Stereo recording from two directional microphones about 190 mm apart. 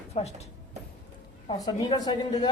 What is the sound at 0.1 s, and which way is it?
Speech, 35° left (ahead or behind).